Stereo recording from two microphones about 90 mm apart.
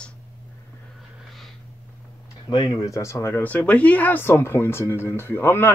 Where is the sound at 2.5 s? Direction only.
60° left (ahead or behind).